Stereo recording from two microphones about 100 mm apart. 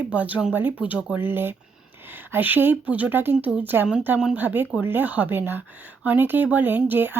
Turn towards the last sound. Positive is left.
turn(degrees=-20)  # may be behind; listen again after turning